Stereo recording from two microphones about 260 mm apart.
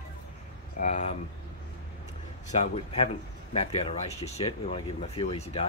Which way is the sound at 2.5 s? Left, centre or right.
Left.